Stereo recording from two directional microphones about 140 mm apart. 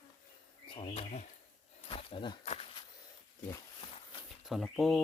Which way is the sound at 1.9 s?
40° left (ahead or behind).